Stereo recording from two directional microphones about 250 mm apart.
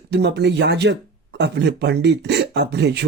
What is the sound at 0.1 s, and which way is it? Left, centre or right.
Speech, right.